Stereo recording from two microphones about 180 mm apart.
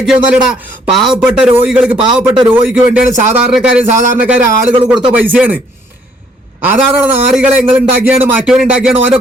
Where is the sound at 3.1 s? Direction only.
40° right (ahead or behind).